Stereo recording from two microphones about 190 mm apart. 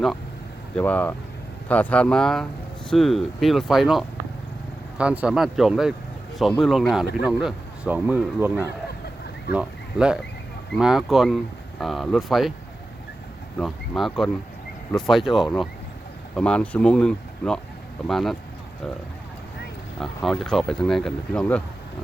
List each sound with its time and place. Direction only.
0.8 s speech: 10° left (ahead or behind)
13.6 s speech: centre (ahead or behind)
20.0 s speech: centre (ahead or behind)